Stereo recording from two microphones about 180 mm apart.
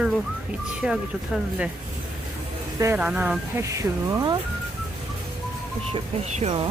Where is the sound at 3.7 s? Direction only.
20° right (ahead or behind).